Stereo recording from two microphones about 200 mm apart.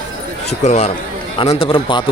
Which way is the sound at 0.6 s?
35° left (ahead or behind).